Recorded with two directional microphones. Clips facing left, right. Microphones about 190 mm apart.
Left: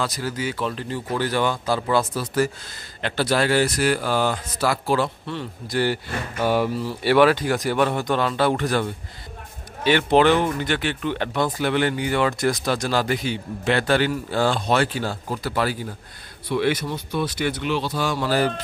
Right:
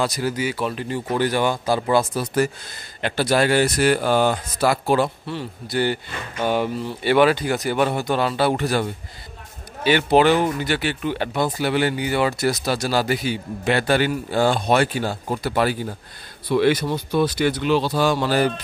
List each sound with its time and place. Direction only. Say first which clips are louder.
0.0 s speech: right 3 dB; 15° right (ahead or behind)
9.8 s a man's voice: right 1 dB; 5° right (ahead or behind)
16.4 s speech: right 4 dB; 35° right (ahead or behind)